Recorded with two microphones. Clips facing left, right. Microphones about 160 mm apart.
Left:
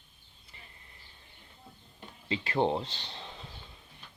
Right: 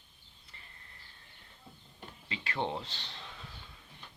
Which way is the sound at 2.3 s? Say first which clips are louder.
Left 7 dB; 35° left (ahead or behind).